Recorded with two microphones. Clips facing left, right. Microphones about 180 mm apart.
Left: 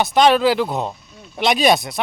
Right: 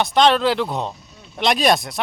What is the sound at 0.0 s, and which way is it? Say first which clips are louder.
Speech: left 2 dB; 5° left (ahead or behind).